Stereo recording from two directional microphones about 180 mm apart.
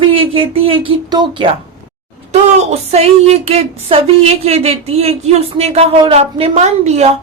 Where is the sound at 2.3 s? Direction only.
35° right (ahead or behind).